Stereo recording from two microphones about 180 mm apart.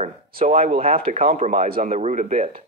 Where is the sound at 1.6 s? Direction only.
55° right (ahead or behind).